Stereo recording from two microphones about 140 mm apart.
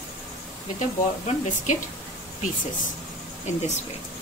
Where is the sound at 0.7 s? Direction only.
60° left (ahead or behind).